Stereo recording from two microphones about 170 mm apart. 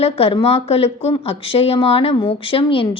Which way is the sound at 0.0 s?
35° left (ahead or behind).